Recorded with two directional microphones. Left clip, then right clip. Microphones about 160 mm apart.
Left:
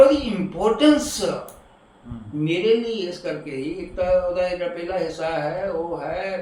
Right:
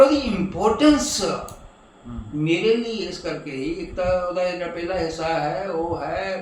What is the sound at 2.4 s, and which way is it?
Speech, centre (ahead or behind).